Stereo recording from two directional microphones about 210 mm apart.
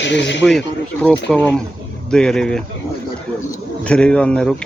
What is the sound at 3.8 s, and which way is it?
Speech, 5° left (ahead or behind).